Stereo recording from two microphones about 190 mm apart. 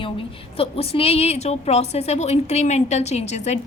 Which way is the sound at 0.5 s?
30° left (ahead or behind).